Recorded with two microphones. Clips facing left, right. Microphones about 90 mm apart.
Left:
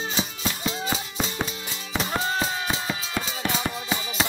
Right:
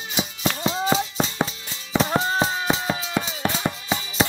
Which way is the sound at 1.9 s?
25° right (ahead or behind).